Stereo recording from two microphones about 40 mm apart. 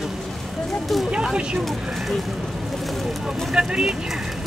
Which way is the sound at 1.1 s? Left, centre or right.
Centre.